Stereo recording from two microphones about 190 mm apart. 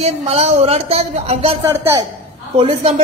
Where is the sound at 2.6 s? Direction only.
30° right (ahead or behind).